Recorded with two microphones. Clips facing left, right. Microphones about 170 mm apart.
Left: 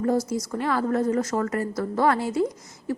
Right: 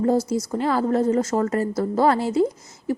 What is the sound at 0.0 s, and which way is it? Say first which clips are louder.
A woman's voice: right 3 dB; 25° right (ahead or behind).